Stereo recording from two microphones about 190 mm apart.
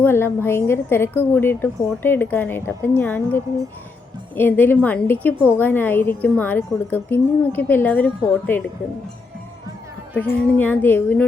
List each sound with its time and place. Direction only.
0.0 s a woman's voice: 10° left (ahead or behind)
10.2 s a woman's voice: 10° left (ahead or behind)